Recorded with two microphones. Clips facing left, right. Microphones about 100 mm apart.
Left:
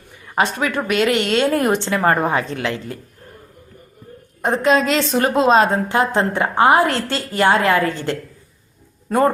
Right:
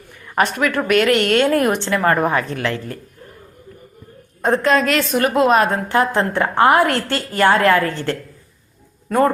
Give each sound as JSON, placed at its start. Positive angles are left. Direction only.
{"t": 0.3, "sound": "a woman's voice", "side_deg": 20}
{"t": 4.4, "sound": "a woman's voice", "side_deg": 15}